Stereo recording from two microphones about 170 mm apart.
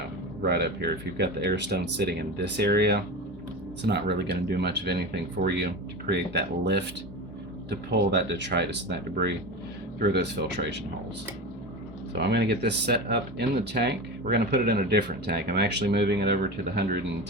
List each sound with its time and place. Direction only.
0.4 s speech: 75° right (ahead or behind)
7.9 s speech: 90° right
12.1 s speech: 75° right (ahead or behind)